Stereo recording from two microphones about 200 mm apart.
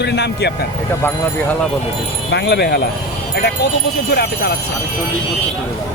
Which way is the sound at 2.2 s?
55° left (ahead or behind).